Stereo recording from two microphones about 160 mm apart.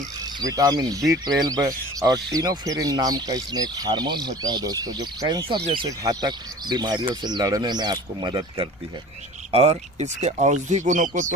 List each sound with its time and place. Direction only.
0.3 s speech: 25° right (ahead or behind)
9.5 s speech: 40° right (ahead or behind)